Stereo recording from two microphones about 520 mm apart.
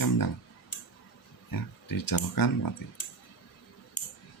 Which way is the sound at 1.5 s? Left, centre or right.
Left.